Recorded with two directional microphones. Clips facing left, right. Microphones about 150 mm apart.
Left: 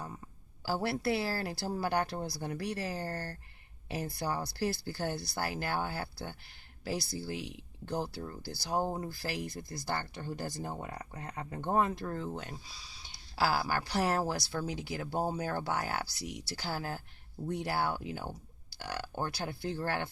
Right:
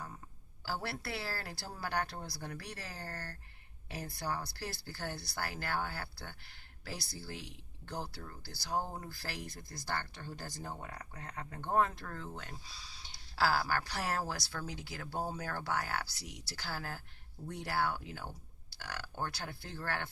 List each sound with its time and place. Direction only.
0.7 s speech: 20° left (ahead or behind)
2.8 s speech: 30° left (ahead or behind)
18.0 s speech: 15° left (ahead or behind)